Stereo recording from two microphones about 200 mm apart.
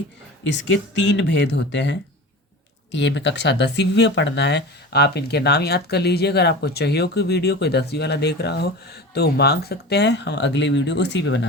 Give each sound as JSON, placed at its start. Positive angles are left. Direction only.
{"t": 0.4, "sound": "speech", "side_deg": 65}